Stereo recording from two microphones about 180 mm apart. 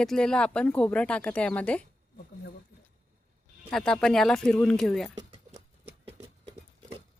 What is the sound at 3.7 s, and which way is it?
Speech, 5° left (ahead or behind).